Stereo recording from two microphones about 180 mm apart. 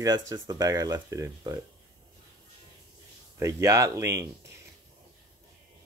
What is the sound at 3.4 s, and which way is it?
Speech, 15° right (ahead or behind).